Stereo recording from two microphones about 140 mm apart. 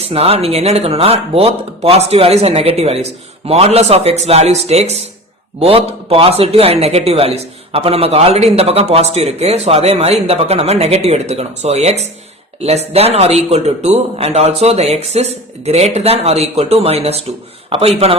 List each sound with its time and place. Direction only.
0.1 s a man's voice: 45° right (ahead or behind)